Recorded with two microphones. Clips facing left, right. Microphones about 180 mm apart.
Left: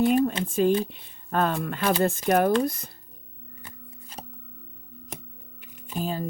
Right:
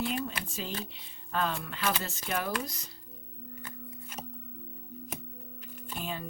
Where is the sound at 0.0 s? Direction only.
50° left (ahead or behind).